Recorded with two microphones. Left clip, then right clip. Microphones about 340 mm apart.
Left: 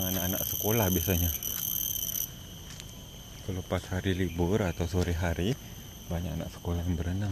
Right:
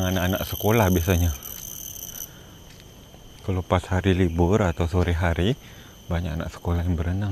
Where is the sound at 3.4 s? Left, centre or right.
Right.